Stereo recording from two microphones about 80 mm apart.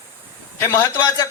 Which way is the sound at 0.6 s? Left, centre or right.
Left.